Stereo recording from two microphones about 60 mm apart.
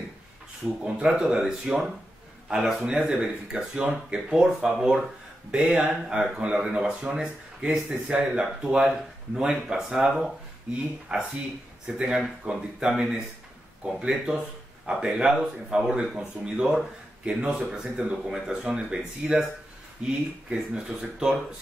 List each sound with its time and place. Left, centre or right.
1.0 s speech: centre